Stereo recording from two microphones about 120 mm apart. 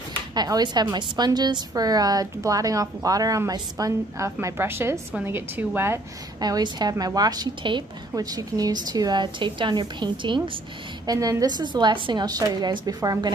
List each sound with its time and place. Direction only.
0.3 s a woman's voice: 35° right (ahead or behind); by 5.7 s 20° right (ahead or behind)
6.4 s a woman's voice: 35° right (ahead or behind)
11.1 s a woman's voice: 30° right (ahead or behind)